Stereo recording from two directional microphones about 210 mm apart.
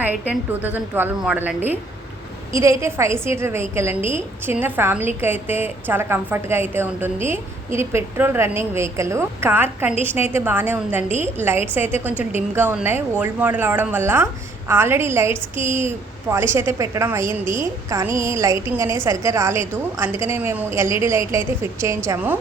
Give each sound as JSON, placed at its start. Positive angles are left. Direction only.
{"t": 0.0, "sound": "a woman's voice", "side_deg": -10}